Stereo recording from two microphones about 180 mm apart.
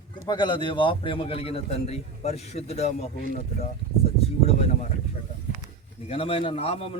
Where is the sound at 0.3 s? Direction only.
25° left (ahead or behind).